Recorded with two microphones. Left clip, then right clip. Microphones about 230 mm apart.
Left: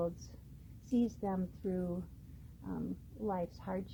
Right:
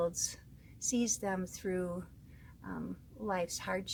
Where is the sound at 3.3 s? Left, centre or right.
Right.